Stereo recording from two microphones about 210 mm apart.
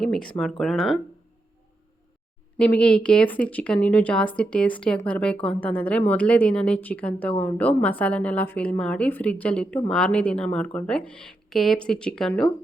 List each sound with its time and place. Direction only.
0.0 s a woman's voice: 5° left (ahead or behind)
2.6 s a woman's voice: 5° left (ahead or behind)